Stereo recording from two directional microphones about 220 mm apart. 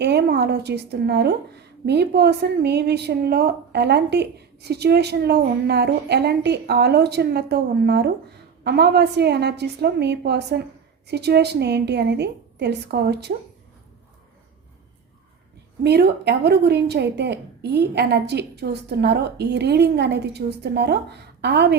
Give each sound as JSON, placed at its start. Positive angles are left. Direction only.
{"t": 0.0, "sound": "a woman's voice", "side_deg": -50}
{"t": 15.8, "sound": "a woman's voice", "side_deg": -45}